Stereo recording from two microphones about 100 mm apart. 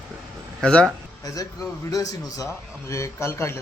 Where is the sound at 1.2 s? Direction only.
35° left (ahead or behind).